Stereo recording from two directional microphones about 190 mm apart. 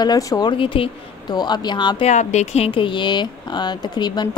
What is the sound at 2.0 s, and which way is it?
A woman's voice, 40° left (ahead or behind).